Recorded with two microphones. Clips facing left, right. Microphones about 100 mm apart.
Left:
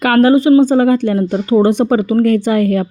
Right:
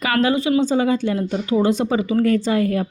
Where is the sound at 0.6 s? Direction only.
50° left (ahead or behind).